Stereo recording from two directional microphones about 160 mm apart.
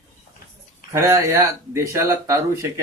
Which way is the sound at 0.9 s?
15° right (ahead or behind).